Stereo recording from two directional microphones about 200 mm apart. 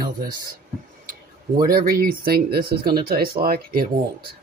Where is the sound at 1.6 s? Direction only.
45° right (ahead or behind).